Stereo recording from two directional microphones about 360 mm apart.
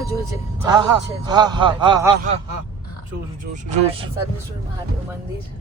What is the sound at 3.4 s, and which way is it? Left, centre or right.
Speech, centre.